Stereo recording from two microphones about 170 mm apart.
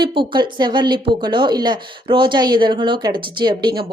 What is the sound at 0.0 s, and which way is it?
Speech, 25° right (ahead or behind).